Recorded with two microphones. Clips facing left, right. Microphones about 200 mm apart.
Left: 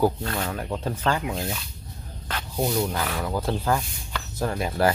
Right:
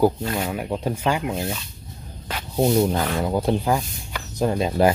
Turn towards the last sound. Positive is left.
turn(degrees=-20)  # may be behind; listen again after turning